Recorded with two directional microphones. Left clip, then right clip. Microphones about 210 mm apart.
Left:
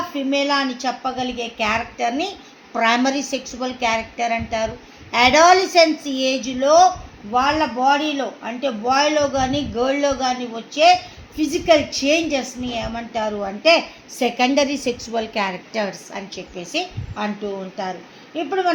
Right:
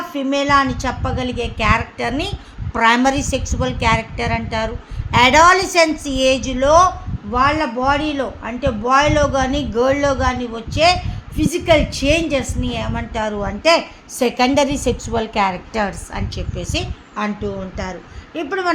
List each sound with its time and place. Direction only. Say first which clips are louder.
0.1 s a woman's voice: right 6 dB; 50° right (ahead or behind)
18.3 s a woman's voice: even; 50° right (ahead or behind)